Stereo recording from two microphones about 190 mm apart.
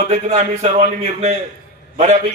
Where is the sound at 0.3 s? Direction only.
35° right (ahead or behind).